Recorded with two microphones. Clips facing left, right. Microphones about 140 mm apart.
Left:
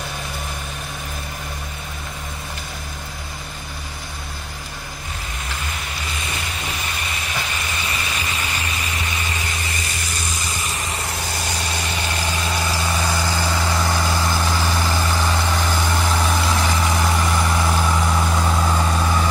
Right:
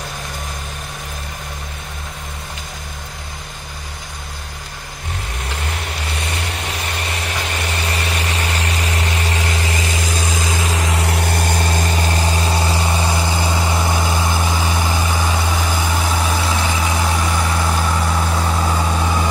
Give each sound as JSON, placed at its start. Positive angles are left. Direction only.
{"t": 7.6, "sound": "vehicle", "side_deg": -70}